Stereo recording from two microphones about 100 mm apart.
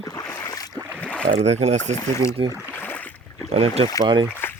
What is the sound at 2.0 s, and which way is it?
Speech, 30° left (ahead or behind).